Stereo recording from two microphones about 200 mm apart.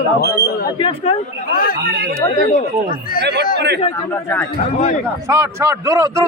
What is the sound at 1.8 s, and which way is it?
Speech, 50° right (ahead or behind).